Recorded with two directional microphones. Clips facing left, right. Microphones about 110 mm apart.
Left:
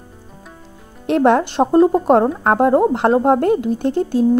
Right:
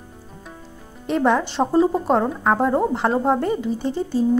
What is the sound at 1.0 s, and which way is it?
A woman's voice, 65° left (ahead or behind).